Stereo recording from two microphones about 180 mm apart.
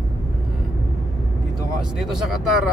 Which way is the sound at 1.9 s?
Centre (ahead or behind).